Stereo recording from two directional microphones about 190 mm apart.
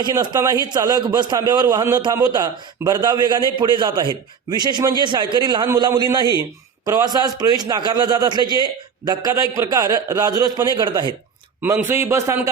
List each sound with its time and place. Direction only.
0.0 s a man's voice: 20° right (ahead or behind)